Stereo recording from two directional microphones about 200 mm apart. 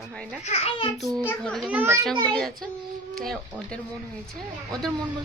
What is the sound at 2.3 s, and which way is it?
A woman's voice, centre (ahead or behind).